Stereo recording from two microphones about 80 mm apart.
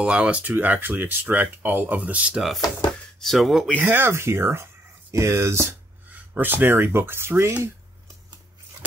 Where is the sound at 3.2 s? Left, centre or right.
Centre.